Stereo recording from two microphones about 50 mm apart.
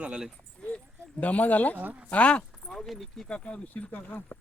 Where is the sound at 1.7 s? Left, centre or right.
Right.